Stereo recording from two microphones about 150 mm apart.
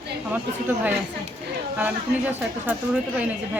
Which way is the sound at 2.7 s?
10° right (ahead or behind).